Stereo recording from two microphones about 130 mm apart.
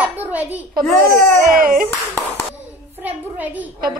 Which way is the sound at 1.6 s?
90° right.